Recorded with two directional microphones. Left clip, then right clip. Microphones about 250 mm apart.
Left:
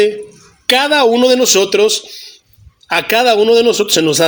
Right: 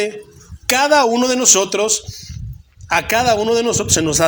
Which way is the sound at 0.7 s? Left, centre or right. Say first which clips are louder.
Left 3 dB; centre.